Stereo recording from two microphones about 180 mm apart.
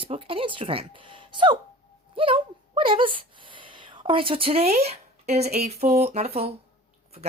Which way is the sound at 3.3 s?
25° right (ahead or behind).